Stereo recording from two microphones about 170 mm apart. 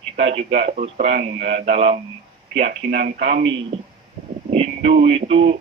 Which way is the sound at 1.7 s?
40° right (ahead or behind).